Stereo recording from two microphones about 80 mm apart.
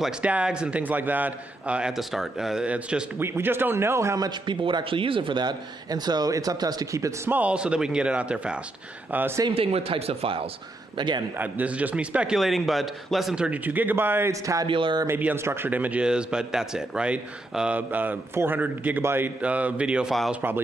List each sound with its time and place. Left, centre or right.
0.2 s a man's voice: centre
3.2 s a man's voice: right
4.3 s a man's voice: right
7.2 s a man's voice: centre
9.1 s a man's voice: right
11.0 s a man's voice: right
11.3 s a man's voice: right
12.4 s a man's voice: centre; by 14.3 s right
14.3 s speech: right
14.7 s speech: right
15.0 s a man's voice: right
19.4 s a man's voice: centre